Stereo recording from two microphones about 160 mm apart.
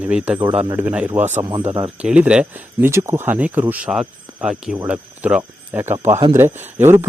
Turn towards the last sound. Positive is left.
turn(degrees=-15)  # may be behind; listen again after turning